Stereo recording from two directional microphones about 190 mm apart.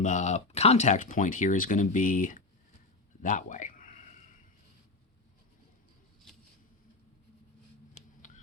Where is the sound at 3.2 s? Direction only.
40° left (ahead or behind).